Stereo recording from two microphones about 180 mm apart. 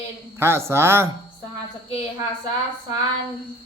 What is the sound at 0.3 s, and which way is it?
Mantra, 15° right (ahead or behind).